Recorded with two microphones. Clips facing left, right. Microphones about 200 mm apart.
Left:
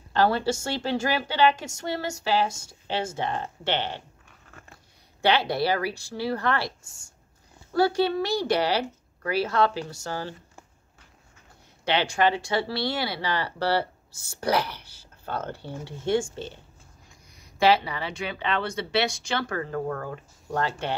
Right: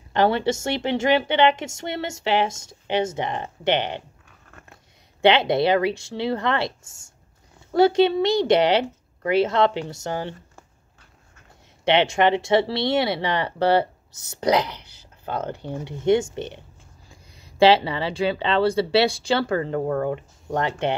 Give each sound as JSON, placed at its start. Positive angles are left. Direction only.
{"t": 0.1, "sound": "speech", "side_deg": -20}
{"t": 5.2, "sound": "speech", "side_deg": -20}
{"t": 11.8, "sound": "speech", "side_deg": -20}